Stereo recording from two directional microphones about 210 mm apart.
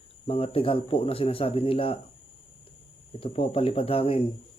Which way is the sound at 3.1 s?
25° left (ahead or behind).